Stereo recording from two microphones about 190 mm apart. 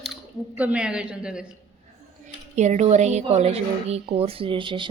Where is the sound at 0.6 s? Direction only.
5° right (ahead or behind).